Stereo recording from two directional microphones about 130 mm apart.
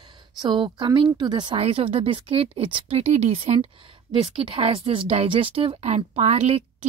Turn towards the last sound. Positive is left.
turn(degrees=-55)  # may be behind; listen again after turning